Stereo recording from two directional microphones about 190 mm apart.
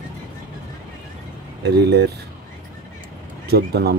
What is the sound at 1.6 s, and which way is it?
Speech, 60° right (ahead or behind).